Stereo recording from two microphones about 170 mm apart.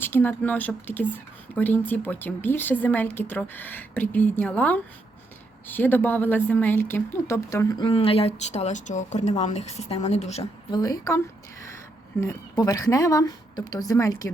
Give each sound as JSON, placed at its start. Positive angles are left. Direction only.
{"t": 0.0, "sound": "a woman's voice", "side_deg": 10}
{"t": 10.7, "sound": "speech", "side_deg": 20}
{"t": 12.2, "sound": "speech", "side_deg": 20}